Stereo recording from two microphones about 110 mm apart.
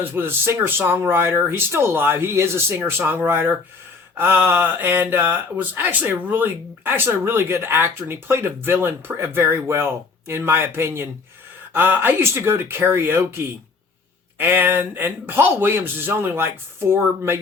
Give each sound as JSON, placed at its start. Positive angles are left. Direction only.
{"t": 0.0, "sound": "speech", "side_deg": -20}